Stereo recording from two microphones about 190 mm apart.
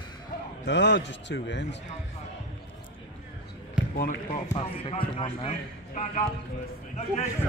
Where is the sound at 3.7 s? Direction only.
45° left (ahead or behind).